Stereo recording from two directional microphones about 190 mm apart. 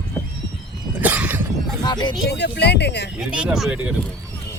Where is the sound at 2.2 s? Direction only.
60° left (ahead or behind).